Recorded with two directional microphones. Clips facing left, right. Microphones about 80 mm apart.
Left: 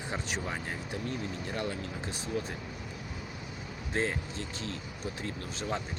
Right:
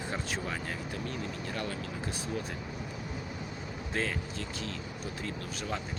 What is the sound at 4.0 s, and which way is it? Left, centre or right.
Speech, left.